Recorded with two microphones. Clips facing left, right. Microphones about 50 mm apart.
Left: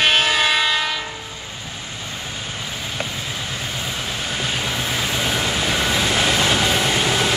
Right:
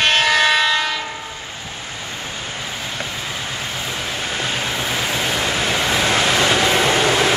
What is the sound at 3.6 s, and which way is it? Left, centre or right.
Vehicle, centre.